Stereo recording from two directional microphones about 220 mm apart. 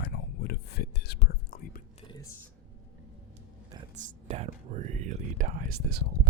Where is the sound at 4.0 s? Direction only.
30° right (ahead or behind).